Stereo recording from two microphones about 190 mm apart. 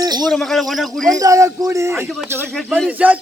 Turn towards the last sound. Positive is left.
turn(degrees=-10)  # may be behind; listen again after turning